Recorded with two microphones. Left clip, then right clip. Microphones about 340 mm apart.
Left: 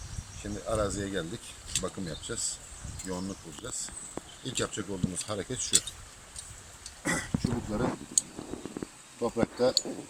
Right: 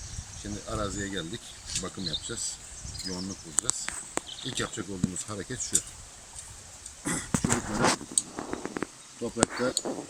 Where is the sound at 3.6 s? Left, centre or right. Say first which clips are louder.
Right 12 dB; right.